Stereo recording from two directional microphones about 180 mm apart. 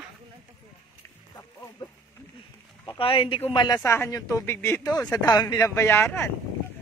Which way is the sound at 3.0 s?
30° left (ahead or behind).